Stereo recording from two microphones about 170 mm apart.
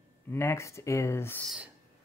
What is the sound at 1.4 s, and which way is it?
Speech, 5° right (ahead or behind).